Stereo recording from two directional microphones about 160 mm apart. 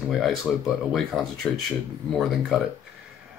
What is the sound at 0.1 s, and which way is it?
Speech, centre (ahead or behind).